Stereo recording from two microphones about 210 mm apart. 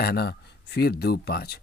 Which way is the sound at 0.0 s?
45° left (ahead or behind).